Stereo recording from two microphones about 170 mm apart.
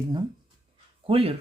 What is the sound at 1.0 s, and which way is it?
Speech, 35° right (ahead or behind).